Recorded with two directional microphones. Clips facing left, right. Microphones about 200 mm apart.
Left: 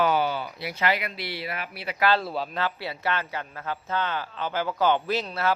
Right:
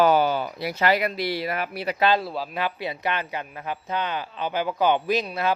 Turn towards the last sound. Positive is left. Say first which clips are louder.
# right 3 dB
turn(degrees=-15)  # may be behind; listen again after turning